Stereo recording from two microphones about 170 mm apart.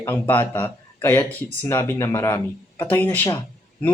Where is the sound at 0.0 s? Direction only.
10° left (ahead or behind).